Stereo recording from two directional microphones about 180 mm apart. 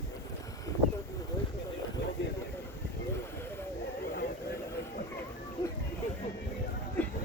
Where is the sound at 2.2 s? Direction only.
90° left.